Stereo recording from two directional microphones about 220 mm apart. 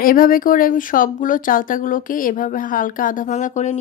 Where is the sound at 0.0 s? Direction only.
40° left (ahead or behind).